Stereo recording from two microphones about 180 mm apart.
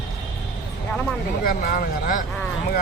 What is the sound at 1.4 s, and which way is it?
Speech, 55° left (ahead or behind).